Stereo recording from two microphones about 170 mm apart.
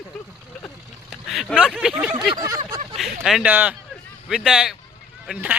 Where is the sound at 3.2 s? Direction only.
5° right (ahead or behind).